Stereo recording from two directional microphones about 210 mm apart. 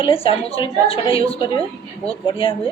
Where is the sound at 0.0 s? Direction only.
25° left (ahead or behind).